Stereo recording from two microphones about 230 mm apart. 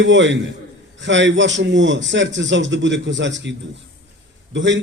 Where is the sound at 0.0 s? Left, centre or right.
Right.